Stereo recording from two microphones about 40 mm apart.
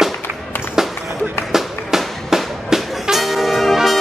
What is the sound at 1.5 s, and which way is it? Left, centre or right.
Music, centre.